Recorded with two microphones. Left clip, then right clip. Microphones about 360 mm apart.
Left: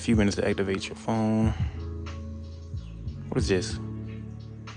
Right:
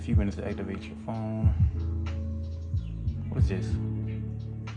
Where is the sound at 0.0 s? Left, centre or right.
Left.